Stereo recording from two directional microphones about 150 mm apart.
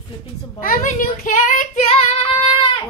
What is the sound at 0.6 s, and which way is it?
A child's voice, 60° left (ahead or behind).